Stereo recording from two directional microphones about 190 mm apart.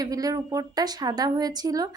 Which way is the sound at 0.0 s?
20° right (ahead or behind).